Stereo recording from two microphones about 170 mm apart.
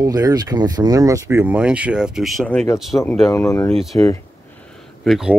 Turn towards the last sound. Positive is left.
turn(degrees=0)  # may be behind; listen again after turning